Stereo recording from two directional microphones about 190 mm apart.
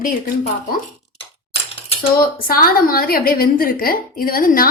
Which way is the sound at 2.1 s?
50° left (ahead or behind).